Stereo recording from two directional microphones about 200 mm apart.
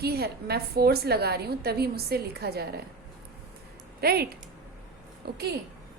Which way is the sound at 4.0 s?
50° right (ahead or behind).